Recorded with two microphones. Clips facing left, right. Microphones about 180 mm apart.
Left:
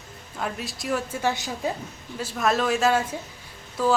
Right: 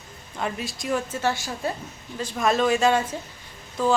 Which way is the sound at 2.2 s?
5° left (ahead or behind).